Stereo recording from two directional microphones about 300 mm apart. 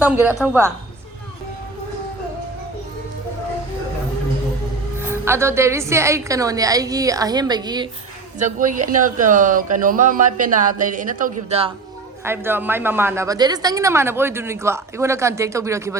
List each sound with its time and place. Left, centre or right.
0.0 s a woman's voice: centre
4.9 s a woman's voice: centre
8.4 s speech: right
12.2 s a woman's voice: centre